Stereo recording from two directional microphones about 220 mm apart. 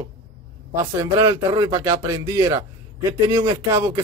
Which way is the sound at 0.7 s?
15° right (ahead or behind).